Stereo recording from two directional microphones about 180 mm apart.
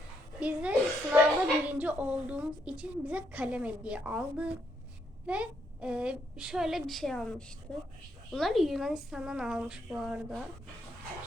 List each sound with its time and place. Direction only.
0.3 s a child's voice: 5° right (ahead or behind)